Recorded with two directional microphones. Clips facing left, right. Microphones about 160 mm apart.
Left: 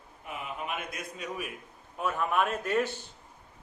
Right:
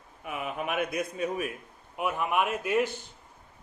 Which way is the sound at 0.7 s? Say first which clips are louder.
Right 7 dB; 65° right (ahead or behind).